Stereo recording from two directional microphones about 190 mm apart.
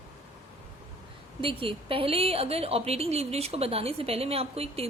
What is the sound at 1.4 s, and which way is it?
A woman's voice, 30° right (ahead or behind).